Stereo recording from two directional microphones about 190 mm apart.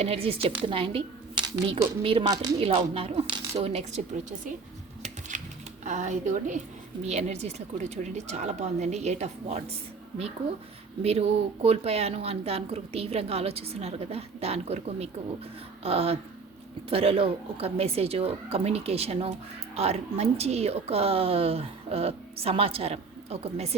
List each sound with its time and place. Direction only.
0.0 s a woman's voice: 30° right (ahead or behind)
5.3 s typewriter: 40° right (ahead or behind)
5.8 s speech: 40° right (ahead or behind)
11.0 s speech: 30° right (ahead or behind)